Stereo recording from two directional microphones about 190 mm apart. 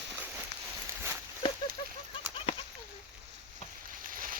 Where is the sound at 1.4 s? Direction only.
25° left (ahead or behind).